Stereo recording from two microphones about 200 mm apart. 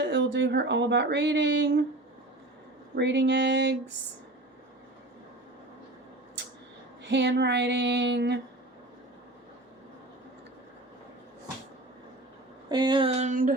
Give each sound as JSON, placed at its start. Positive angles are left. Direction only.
{"t": 0.0, "sound": "speech", "side_deg": -65}
{"t": 2.9, "sound": "speech", "side_deg": -60}
{"t": 7.0, "sound": "speech", "side_deg": -60}
{"t": 12.6, "sound": "a sound", "side_deg": -20}